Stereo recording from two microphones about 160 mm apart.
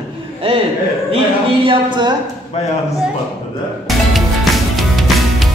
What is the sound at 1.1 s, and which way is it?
A man's voice, 30° right (ahead or behind).